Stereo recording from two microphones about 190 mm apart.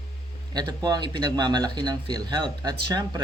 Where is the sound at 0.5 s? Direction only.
20° right (ahead or behind).